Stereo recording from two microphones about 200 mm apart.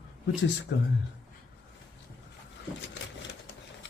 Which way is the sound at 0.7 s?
60° left (ahead or behind).